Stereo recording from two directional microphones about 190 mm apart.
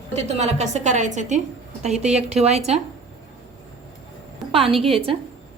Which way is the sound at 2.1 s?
35° right (ahead or behind).